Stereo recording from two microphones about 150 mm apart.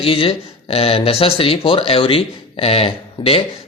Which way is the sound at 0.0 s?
40° left (ahead or behind).